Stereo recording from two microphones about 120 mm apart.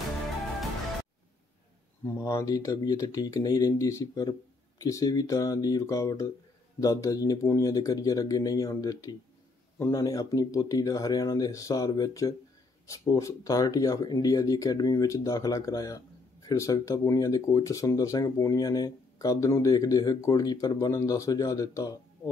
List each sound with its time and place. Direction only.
2.1 s speech: 25° left (ahead or behind)